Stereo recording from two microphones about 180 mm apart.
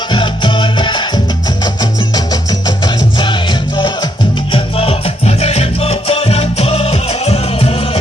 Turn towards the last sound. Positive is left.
turn(degrees=35)  # may be behind; listen again after turning